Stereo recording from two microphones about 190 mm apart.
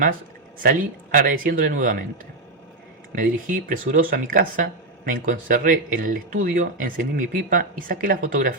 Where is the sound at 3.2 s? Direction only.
45° right (ahead or behind).